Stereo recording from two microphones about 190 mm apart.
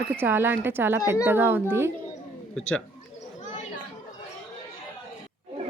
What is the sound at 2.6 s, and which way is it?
Speech, 5° left (ahead or behind).